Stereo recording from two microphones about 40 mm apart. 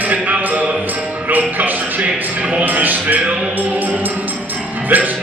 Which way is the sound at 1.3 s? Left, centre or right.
Right.